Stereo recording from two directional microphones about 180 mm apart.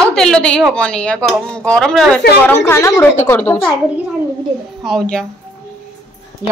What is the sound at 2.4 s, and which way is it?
A woman's voice, 15° left (ahead or behind).